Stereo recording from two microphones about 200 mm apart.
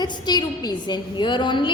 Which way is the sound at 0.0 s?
20° left (ahead or behind).